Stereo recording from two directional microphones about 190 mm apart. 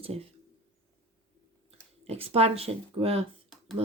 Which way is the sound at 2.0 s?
30° right (ahead or behind).